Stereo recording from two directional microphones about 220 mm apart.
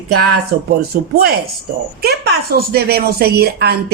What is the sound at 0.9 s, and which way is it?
Speech, 45° right (ahead or behind).